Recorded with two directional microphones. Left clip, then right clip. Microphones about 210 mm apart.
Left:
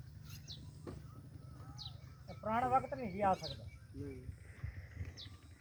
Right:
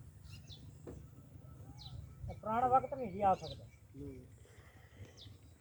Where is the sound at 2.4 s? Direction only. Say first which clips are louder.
Right 2 dB; 10° left (ahead or behind).